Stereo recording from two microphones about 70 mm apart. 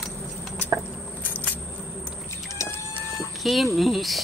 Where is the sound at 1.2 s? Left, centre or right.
Left.